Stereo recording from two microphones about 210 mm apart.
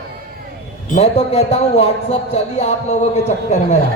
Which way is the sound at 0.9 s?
30° left (ahead or behind).